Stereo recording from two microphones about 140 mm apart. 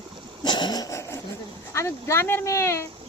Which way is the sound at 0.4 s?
30° left (ahead or behind).